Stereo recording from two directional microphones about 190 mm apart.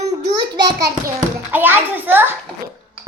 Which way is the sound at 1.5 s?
10° right (ahead or behind).